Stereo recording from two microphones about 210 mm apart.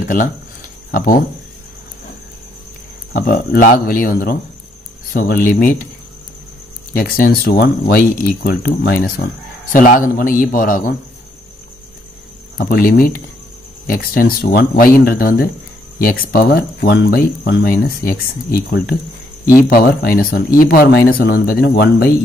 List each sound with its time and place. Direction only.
0.0 s speech: 40° left (ahead or behind)
3.1 s a man's voice: 45° left (ahead or behind)
6.9 s a man's voice: 45° left (ahead or behind)
12.5 s speech: 45° left (ahead or behind)